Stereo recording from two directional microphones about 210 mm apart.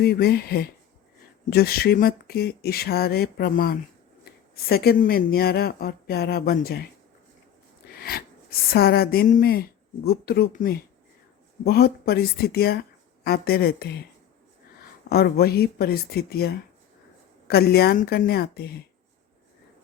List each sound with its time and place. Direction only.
0.0 s speech: 50° left (ahead or behind)
8.0 s speech: 45° left (ahead or behind)
15.1 s speech: 45° left (ahead or behind)